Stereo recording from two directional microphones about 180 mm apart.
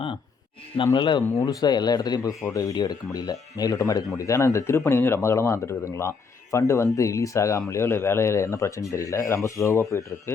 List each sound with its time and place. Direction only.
0.9 s speech: 25° left (ahead or behind)